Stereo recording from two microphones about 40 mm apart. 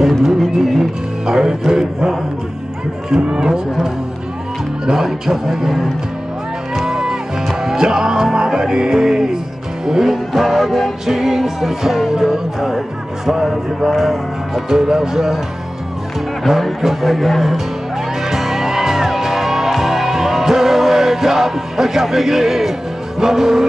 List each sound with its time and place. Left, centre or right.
0.6 s speech: centre
6.9 s music: centre
9.8 s speech: centre
16.4 s speech: centre
18.3 s music: centre